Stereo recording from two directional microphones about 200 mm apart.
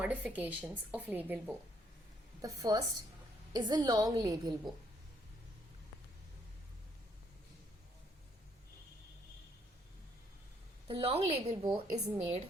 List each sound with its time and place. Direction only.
0.0 s a woman's voice: 5° right (ahead or behind)
10.8 s a woman's voice: 30° right (ahead or behind)
11.6 s a woman's voice: 15° right (ahead or behind)